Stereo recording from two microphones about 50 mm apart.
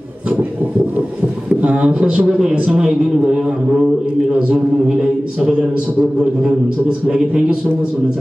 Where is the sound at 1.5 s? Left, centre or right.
Right.